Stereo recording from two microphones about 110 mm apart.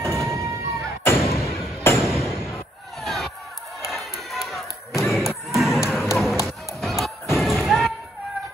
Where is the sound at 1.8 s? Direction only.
25° left (ahead or behind).